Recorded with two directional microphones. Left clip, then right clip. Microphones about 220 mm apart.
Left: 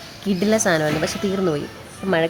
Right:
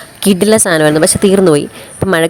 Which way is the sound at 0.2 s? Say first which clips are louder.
Right 10 dB; 45° right (ahead or behind).